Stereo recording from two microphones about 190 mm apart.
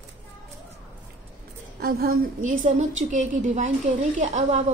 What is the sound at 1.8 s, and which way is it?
A woman's voice, 50° right (ahead or behind).